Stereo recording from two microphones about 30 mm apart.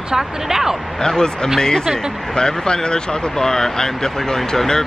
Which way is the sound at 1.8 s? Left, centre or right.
Centre.